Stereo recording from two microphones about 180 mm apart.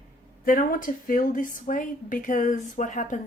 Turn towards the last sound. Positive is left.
turn(degrees=40)  # may be behind; listen again after turning